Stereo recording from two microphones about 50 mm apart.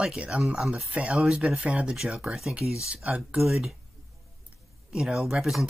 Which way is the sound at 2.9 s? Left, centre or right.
Right.